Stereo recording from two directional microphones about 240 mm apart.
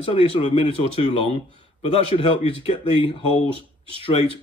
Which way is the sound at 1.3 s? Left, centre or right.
Right.